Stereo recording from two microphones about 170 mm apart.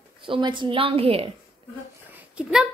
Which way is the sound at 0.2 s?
30° right (ahead or behind).